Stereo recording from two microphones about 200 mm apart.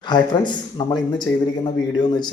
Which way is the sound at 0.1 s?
20° left (ahead or behind).